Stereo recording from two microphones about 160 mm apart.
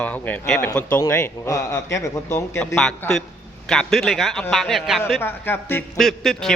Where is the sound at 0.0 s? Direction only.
10° left (ahead or behind).